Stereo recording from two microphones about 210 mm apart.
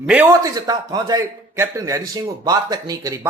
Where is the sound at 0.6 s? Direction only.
20° right (ahead or behind).